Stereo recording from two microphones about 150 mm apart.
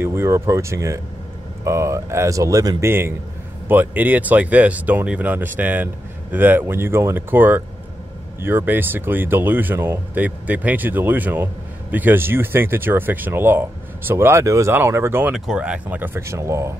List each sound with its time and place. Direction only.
0.0 s speech: 15° right (ahead or behind)
15.3 s speech: 5° right (ahead or behind)